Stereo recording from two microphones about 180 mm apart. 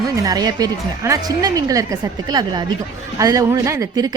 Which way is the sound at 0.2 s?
20° right (ahead or behind).